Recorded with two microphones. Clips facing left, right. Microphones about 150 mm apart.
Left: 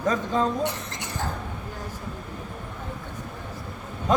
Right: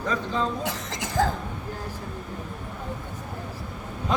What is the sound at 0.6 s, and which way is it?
Speech, 90° right.